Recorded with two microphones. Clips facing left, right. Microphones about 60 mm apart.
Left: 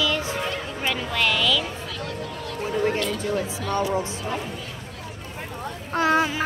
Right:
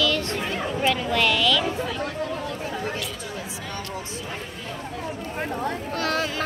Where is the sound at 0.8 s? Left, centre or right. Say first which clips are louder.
Right 2 dB; centre.